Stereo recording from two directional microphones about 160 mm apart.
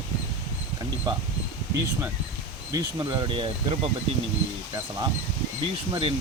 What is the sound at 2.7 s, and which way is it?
Speech, 25° right (ahead or behind).